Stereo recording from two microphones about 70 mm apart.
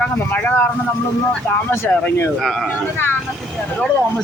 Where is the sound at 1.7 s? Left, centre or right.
Left.